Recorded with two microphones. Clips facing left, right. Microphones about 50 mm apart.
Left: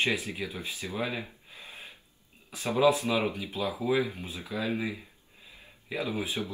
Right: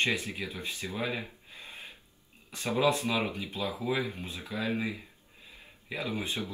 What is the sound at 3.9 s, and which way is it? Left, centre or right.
Speech, centre.